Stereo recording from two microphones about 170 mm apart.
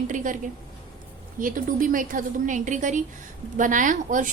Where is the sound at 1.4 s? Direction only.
50° right (ahead or behind).